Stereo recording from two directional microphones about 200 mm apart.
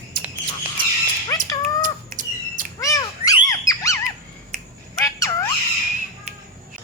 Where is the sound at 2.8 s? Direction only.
15° left (ahead or behind).